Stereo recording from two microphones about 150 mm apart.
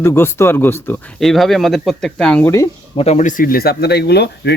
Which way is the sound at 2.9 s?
45° left (ahead or behind).